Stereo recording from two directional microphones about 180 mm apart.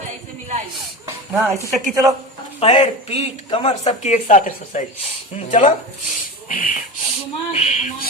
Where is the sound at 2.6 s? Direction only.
35° left (ahead or behind).